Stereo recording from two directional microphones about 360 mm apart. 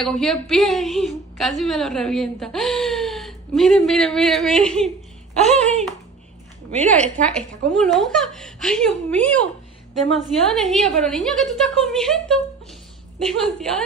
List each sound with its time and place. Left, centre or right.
0.0 s a woman's voice: centre
6.9 s a woman's voice: centre
10.5 s a woman's voice: centre